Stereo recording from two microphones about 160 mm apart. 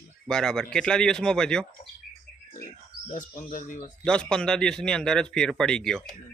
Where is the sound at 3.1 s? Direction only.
55° left (ahead or behind).